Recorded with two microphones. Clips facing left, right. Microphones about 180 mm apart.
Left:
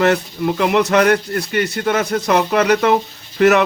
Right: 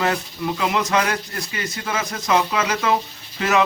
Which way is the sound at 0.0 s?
60° left (ahead or behind).